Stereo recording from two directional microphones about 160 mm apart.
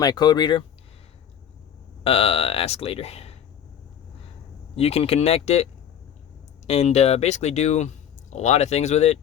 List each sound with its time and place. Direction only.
0.0 s speech: 25° left (ahead or behind)
2.0 s speech: 40° left (ahead or behind)
4.7 s speech: 40° left (ahead or behind)
6.7 s speech: 40° left (ahead or behind)